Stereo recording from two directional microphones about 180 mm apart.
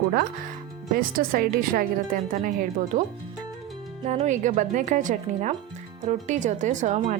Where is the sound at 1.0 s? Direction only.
55° right (ahead or behind).